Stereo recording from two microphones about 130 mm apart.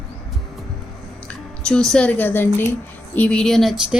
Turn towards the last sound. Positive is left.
turn(degrees=-5)  # may be behind; listen again after turning